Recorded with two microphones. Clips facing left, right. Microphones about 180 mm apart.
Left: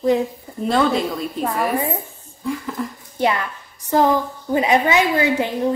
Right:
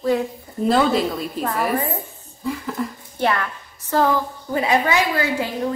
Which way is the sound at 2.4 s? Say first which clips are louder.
Even; centre (ahead or behind).